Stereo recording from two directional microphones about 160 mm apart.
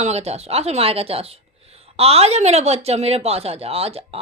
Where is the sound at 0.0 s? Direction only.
40° right (ahead or behind).